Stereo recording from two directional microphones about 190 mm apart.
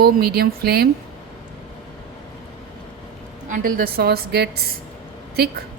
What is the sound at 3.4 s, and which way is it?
Speech, 45° right (ahead or behind).